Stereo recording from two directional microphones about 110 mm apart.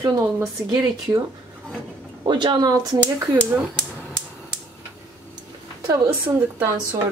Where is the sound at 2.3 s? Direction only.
45° right (ahead or behind).